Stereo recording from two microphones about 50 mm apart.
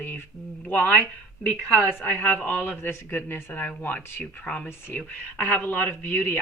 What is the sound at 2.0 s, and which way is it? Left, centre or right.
A woman's voice, left.